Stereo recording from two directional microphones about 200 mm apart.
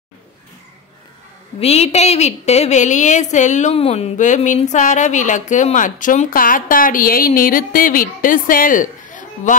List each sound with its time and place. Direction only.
1.6 s a woman's voice: 30° left (ahead or behind)